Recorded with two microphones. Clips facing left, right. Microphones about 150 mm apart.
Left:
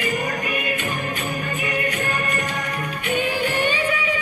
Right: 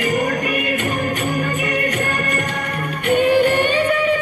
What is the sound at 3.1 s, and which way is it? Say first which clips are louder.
Music: right 9 dB; 55° right (ahead or behind).